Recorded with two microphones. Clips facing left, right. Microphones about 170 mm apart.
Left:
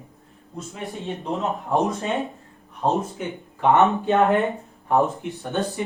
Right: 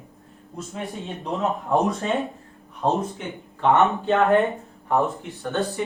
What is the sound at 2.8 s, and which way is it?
Speech, centre (ahead or behind).